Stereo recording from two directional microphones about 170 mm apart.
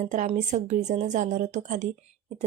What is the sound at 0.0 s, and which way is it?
A woman's voice, 45° right (ahead or behind).